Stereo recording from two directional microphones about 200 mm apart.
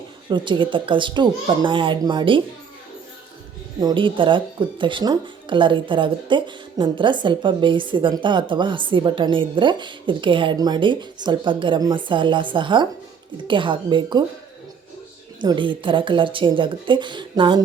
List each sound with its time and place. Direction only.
0.3 s speech: 25° right (ahead or behind)
3.8 s speech: 20° right (ahead or behind)
15.4 s speech: 25° right (ahead or behind)